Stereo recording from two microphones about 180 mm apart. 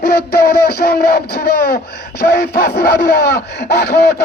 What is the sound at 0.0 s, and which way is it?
Speech, 60° left (ahead or behind).